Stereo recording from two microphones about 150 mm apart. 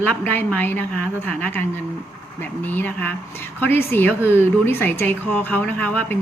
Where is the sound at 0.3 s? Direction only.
10° left (ahead or behind).